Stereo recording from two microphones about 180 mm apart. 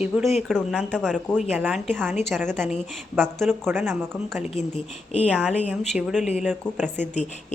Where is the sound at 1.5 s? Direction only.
10° right (ahead or behind).